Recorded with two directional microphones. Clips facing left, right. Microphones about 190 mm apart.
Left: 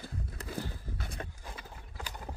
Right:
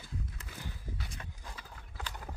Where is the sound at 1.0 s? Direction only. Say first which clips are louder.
Left 5 dB; 50° left (ahead or behind).